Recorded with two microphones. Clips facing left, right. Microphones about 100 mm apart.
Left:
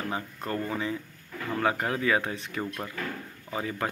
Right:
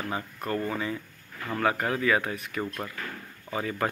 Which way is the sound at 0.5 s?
20° left (ahead or behind).